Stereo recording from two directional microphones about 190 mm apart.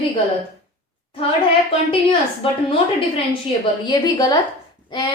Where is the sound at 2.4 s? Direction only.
30° left (ahead or behind).